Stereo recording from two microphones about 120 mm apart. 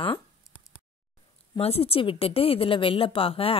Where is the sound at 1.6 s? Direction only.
55° left (ahead or behind).